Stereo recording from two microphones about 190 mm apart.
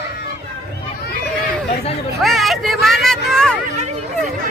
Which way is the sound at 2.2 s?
Centre (ahead or behind).